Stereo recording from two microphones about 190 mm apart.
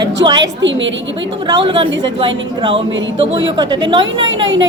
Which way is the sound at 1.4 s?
25° right (ahead or behind).